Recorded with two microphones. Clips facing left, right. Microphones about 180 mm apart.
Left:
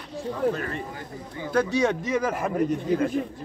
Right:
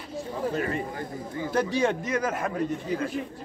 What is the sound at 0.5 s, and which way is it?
Speech, 20° right (ahead or behind).